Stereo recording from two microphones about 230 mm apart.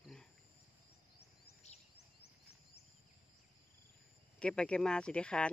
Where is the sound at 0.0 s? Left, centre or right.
Centre.